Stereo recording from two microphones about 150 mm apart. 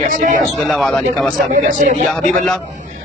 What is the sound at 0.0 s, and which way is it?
Speech, 60° right (ahead or behind).